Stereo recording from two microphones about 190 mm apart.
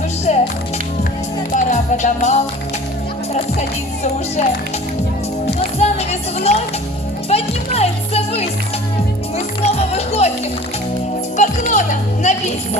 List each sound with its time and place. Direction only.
0.3 s music: 40° left (ahead or behind)
1.5 s music: 40° left (ahead or behind)
5.5 s music: 35° left (ahead or behind)
9.6 s music: 35° left (ahead or behind)
11.3 s music: 40° left (ahead or behind)